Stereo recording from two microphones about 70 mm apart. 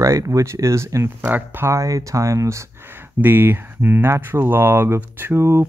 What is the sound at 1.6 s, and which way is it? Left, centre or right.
Speech, right.